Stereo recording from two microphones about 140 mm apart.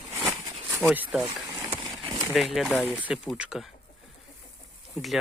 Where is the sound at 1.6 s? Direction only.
35° right (ahead or behind).